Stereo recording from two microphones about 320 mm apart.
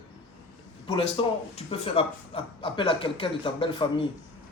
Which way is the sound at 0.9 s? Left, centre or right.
Centre.